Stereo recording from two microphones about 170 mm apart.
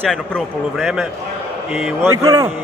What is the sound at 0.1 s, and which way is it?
Speech, centre (ahead or behind).